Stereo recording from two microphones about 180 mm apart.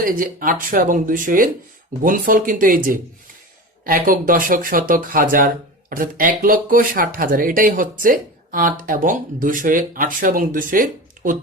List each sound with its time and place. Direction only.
0.0 s speech: 50° right (ahead or behind)